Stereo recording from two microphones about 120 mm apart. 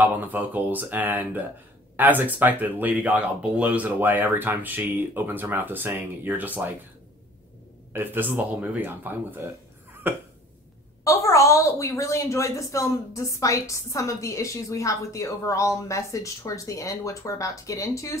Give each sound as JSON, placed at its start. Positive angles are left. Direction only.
{"t": 0.0, "sound": "speech", "side_deg": -15}
{"t": 7.9, "sound": "speech", "side_deg": -15}
{"t": 11.1, "sound": "a woman's voice", "side_deg": 25}